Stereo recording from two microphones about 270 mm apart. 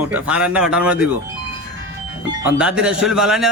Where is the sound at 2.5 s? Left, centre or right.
Centre.